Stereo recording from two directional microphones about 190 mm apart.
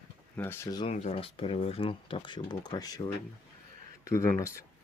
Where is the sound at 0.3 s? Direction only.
10° left (ahead or behind).